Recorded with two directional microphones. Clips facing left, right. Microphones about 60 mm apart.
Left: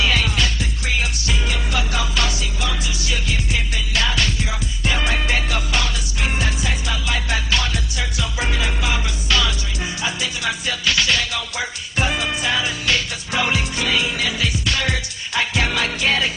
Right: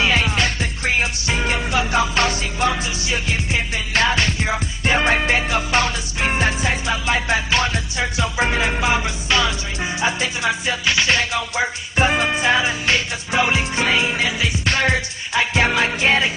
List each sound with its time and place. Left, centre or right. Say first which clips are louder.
0.0 s music: right 2 dB; right
14.6 s music: right 4 dB; right